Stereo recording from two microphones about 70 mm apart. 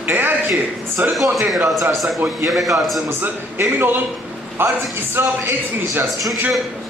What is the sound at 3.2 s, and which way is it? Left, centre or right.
A man's voice, right.